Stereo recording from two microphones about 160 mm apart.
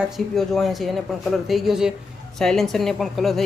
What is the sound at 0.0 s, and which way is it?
A woman's voice, centre (ahead or behind).